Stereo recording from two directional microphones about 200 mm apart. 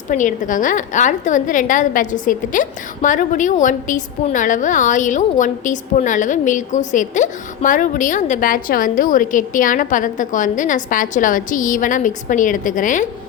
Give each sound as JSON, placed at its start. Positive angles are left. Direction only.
{"t": 0.1, "sound": "a woman's voice", "side_deg": 40}